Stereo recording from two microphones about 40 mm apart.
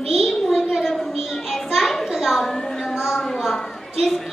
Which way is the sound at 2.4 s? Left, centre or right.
Centre.